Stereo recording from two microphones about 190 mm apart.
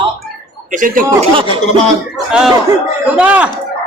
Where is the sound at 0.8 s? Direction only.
45° right (ahead or behind).